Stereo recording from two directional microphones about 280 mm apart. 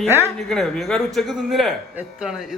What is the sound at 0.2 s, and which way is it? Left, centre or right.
A man's voice, centre.